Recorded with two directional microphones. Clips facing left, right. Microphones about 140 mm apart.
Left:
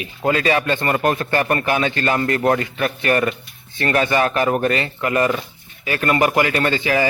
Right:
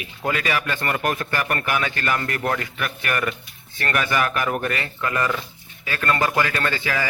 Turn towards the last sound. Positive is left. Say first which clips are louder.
# left 6 dB
turn(degrees=20)  # may be behind; listen again after turning